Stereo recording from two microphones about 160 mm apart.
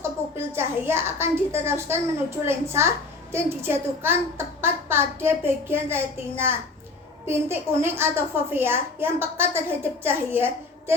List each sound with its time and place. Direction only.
0.3 s a woman's voice: 15° right (ahead or behind)